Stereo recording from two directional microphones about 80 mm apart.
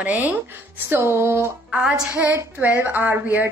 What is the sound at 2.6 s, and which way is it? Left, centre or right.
Speech, right.